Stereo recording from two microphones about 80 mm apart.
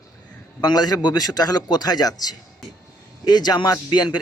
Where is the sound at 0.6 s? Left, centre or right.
Left.